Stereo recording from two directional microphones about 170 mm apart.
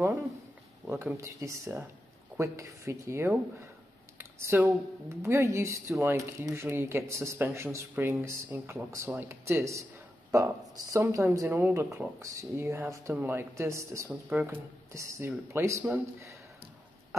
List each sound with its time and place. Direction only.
0.8 s speech: 15° right (ahead or behind)